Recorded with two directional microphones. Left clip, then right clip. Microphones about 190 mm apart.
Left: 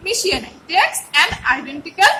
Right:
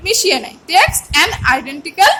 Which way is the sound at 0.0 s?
40° right (ahead or behind).